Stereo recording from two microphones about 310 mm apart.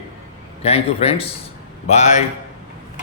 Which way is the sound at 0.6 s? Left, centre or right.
Centre.